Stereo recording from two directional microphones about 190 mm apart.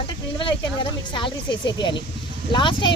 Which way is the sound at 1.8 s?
25° left (ahead or behind).